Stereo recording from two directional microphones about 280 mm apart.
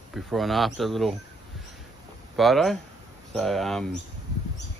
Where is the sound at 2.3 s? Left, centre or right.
Centre.